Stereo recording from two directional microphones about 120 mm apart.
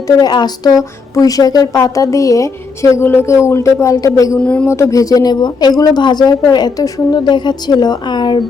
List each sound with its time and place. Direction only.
0.2 s speech: 35° left (ahead or behind)
4.4 s speech: 10° left (ahead or behind)
4.6 s speech: 25° left (ahead or behind)